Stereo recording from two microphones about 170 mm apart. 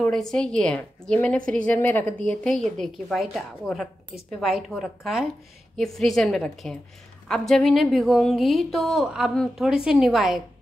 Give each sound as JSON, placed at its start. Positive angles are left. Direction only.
{"t": 0.0, "sound": "a woman's voice", "side_deg": 5}